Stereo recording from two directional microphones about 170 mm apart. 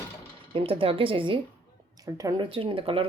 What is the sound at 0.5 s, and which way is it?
Speech, 35° right (ahead or behind).